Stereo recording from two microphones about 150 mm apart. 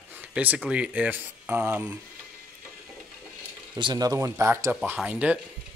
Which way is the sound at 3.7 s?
25° right (ahead or behind).